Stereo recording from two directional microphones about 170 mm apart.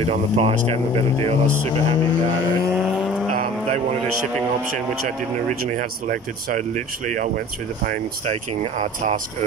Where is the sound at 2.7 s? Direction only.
Centre (ahead or behind).